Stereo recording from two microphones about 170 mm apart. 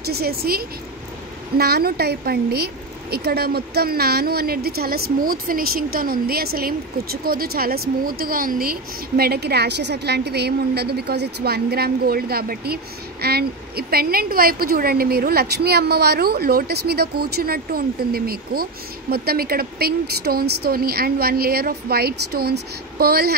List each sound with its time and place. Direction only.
0.0 s a woman's voice: 65° right (ahead or behind)